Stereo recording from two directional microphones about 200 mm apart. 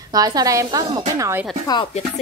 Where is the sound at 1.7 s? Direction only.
25° left (ahead or behind).